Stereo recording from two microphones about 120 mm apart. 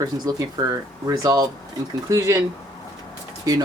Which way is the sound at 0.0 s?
30° right (ahead or behind).